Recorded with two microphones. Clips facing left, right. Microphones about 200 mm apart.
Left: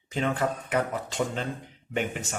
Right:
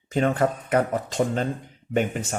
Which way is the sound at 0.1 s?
45° right (ahead or behind).